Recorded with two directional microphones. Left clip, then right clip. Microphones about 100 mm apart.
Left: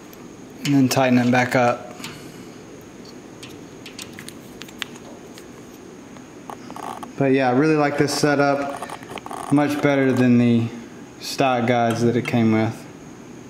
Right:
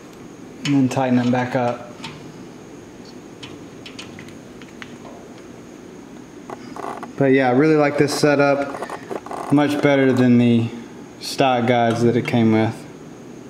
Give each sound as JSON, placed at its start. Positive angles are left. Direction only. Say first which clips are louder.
{"t": 0.7, "sound": "speech", "louder": "left 2 dB", "side_deg": 30}
{"t": 7.2, "sound": "a man's voice", "louder": "right 2 dB", "side_deg": 5}